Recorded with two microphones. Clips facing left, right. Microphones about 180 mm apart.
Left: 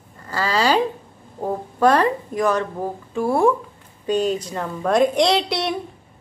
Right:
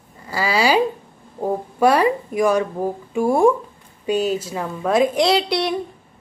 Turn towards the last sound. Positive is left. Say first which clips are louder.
# right 1 dB
turn(degrees=0)  # may be behind; listen again after turning